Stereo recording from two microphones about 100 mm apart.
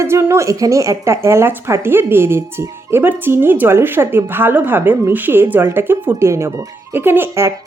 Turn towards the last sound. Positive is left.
turn(degrees=-25)  # may be behind; listen again after turning